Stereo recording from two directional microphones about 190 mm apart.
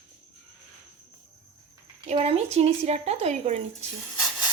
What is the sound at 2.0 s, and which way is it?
Speech, 30° right (ahead or behind).